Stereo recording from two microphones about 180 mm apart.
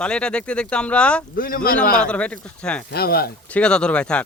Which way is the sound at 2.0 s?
5° left (ahead or behind).